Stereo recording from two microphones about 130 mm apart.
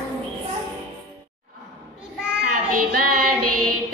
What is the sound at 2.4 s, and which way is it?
Child singing, 90° right.